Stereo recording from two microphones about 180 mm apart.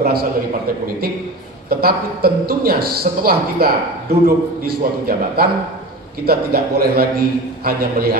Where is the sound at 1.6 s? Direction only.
60° right (ahead or behind).